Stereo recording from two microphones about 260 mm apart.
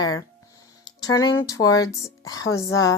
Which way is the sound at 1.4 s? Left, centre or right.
Centre.